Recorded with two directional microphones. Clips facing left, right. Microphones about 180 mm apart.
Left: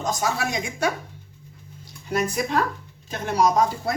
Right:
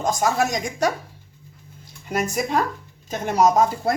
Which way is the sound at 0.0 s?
50° right (ahead or behind).